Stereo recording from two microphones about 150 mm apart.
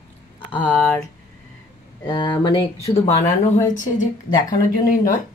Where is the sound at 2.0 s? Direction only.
25° left (ahead or behind).